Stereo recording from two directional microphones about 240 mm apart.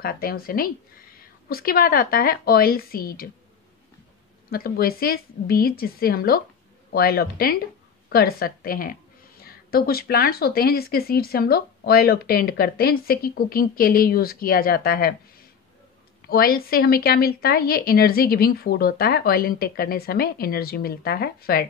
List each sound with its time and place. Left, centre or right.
0.0 s speech: left
4.5 s speech: left